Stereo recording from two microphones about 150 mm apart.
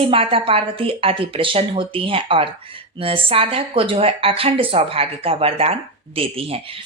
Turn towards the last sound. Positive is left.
turn(degrees=-40)  # may be behind; listen again after turning